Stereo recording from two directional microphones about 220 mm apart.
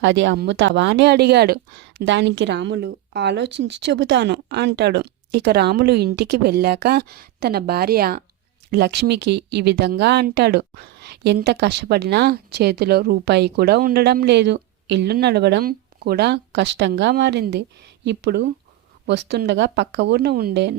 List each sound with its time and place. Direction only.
0.0 s speech: 55° right (ahead or behind)